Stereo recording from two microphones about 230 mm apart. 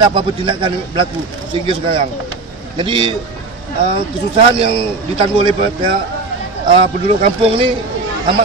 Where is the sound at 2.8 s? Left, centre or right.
Right.